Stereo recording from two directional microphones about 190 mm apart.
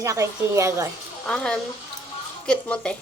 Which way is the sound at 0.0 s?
15° right (ahead or behind).